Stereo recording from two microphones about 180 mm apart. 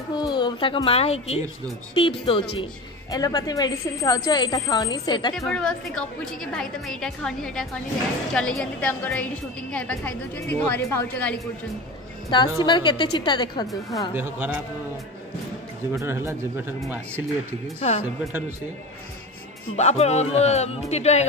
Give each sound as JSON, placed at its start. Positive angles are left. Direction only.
{"t": 0.1, "sound": "a woman's voice", "side_deg": 25}
{"t": 5.3, "sound": "a woman's voice", "side_deg": 5}
{"t": 12.3, "sound": "a woman's voice", "side_deg": 25}
{"t": 14.1, "sound": "speech", "side_deg": -10}
{"t": 15.9, "sound": "speech", "side_deg": -15}
{"t": 17.7, "sound": "speech", "side_deg": 35}
{"t": 19.8, "sound": "speech", "side_deg": 40}